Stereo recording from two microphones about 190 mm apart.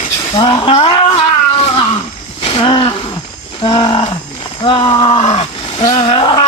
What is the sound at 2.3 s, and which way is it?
Wild animals, 30° left (ahead or behind).